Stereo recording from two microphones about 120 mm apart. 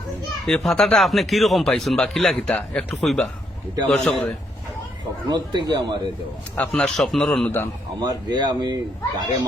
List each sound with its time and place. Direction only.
0.4 s a man's voice: 5° left (ahead or behind)
5.3 s speech: 35° right (ahead or behind)
6.6 s a man's voice: 10° left (ahead or behind)
8.0 s speech: 40° right (ahead or behind)